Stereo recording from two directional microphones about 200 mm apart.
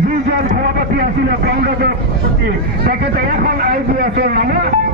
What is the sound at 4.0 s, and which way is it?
Speech, 50° right (ahead or behind).